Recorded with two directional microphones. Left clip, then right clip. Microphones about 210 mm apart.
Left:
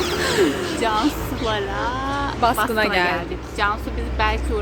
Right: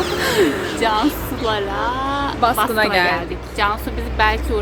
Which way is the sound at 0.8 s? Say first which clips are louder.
Right 3 dB; 15° right (ahead or behind).